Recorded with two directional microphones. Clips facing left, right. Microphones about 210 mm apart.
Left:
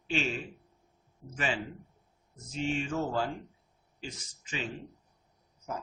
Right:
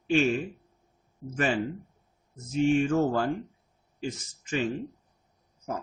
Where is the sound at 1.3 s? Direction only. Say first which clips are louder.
Right 6 dB; 50° right (ahead or behind).